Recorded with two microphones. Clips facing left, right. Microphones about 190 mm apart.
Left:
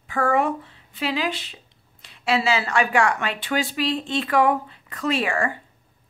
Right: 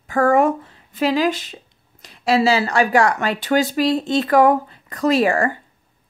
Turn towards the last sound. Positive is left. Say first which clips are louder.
# right 7 dB
turn(degrees=-40)  # may be behind; listen again after turning